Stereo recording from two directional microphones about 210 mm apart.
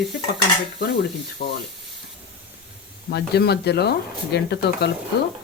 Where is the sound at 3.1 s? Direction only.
50° left (ahead or behind).